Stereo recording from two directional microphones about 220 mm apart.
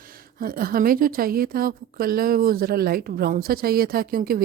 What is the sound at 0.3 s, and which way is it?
A woman's voice, 40° right (ahead or behind).